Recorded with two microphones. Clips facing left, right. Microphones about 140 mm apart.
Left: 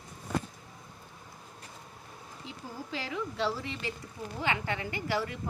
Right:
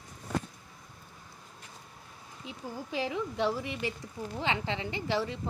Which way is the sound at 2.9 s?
20° right (ahead or behind).